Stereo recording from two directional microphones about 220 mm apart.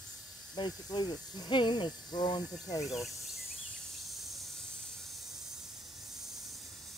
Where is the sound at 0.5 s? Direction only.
20° left (ahead or behind).